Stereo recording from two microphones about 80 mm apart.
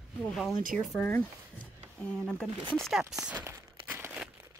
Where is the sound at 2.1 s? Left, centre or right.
Centre.